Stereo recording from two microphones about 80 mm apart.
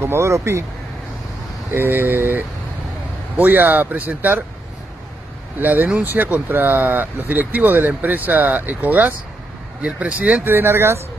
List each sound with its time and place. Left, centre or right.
0.0 s speech: right
1.7 s speech: right
5.6 s speech: right
10.5 s speech: right